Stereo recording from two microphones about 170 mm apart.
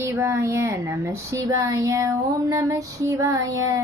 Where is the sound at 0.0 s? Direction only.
15° right (ahead or behind).